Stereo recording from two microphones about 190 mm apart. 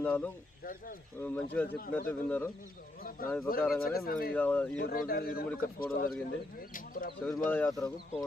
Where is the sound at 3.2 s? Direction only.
50° left (ahead or behind).